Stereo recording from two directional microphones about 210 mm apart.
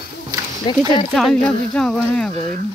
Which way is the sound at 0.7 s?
Centre (ahead or behind).